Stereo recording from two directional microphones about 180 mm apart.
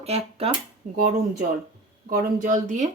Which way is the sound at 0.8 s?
50° right (ahead or behind).